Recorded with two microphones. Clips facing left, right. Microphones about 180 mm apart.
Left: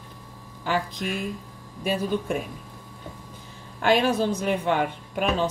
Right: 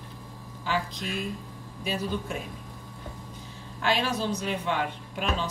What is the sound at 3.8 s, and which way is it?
A woman's voice, 50° left (ahead or behind).